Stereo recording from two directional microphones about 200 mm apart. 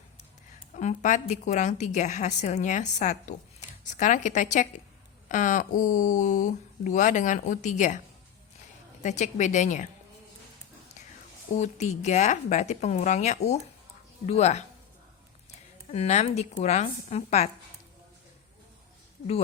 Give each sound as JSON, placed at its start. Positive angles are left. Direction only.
{"t": 0.8, "sound": "speech", "side_deg": 40}
{"t": 9.0, "sound": "speech", "side_deg": 35}
{"t": 11.5, "sound": "speech", "side_deg": 35}